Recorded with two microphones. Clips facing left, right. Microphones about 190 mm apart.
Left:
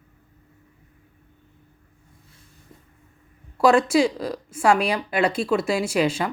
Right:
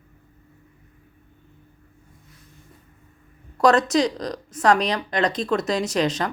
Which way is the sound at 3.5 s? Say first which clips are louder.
Left 1 dB; 10° left (ahead or behind).